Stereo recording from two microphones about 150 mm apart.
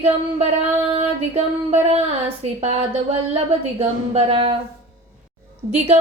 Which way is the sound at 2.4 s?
45° right (ahead or behind).